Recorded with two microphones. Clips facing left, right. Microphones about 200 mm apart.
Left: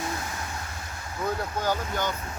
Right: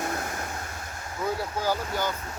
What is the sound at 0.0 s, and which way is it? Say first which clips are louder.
Vehicle: right 2 dB; 55° right (ahead or behind).